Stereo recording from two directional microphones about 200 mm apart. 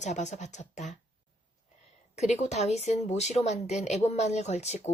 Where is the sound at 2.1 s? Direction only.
35° left (ahead or behind).